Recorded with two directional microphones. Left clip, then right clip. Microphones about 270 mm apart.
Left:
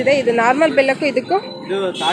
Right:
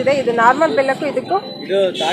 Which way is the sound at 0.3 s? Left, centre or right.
Left.